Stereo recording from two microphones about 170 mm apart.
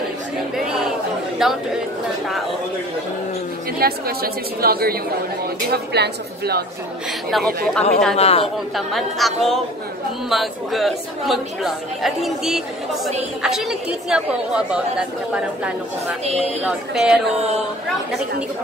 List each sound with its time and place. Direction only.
1.4 s a woman's voice: 5° right (ahead or behind)
3.8 s a woman's voice: 65° right (ahead or behind)
7.2 s a woman's voice: centre (ahead or behind)
8.2 s a man's voice: 35° left (ahead or behind)
8.7 s a woman's voice: centre (ahead or behind)